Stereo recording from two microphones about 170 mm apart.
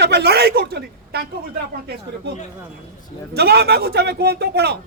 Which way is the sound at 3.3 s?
70° right (ahead or behind).